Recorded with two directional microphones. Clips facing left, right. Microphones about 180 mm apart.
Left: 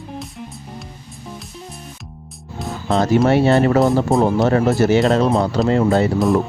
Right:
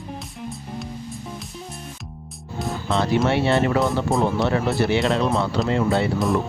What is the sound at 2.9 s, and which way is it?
Speech, 40° left (ahead or behind).